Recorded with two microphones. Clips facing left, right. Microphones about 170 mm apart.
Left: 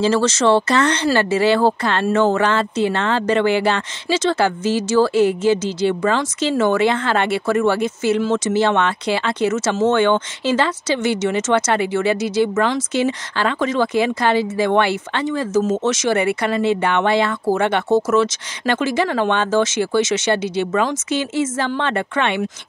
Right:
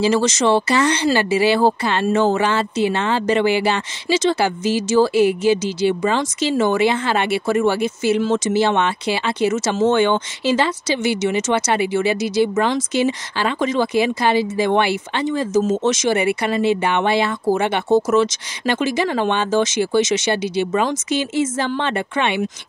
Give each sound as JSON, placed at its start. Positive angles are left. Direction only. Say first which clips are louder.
{"t": 0.0, "sound": "speech", "louder": "left 1 dB", "side_deg": -15}
{"t": 8.2, "sound": "speech", "louder": "even", "side_deg": -20}